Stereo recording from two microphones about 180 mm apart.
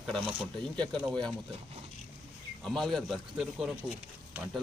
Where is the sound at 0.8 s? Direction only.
5° left (ahead or behind).